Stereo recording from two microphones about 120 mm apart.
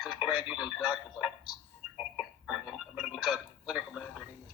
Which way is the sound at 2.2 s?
5° right (ahead or behind).